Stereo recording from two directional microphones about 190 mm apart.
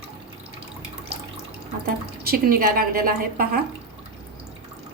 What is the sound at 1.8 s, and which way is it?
Speech, 50° right (ahead or behind).